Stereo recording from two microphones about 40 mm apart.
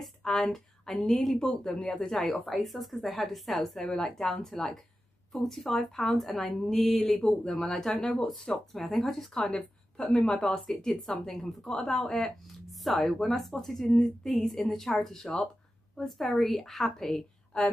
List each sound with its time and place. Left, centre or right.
0.2 s a sound: centre
1.0 s a woman's voice: centre
1.7 s a woman's voice: centre
2.5 s a woman's voice: centre
8.8 s a woman's voice: centre
10.2 s speech: left
10.8 s a woman's voice: centre